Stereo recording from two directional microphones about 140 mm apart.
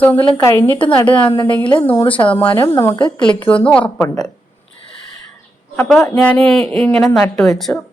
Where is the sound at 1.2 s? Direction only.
35° left (ahead or behind).